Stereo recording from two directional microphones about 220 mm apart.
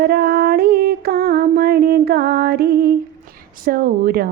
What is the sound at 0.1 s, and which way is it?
Music, 45° right (ahead or behind).